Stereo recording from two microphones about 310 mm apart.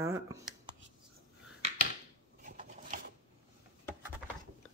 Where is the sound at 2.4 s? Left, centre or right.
Right.